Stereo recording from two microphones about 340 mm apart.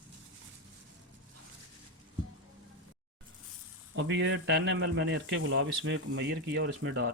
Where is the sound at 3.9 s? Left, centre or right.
Right.